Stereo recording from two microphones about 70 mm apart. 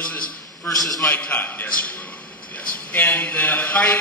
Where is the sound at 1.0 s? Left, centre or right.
Left.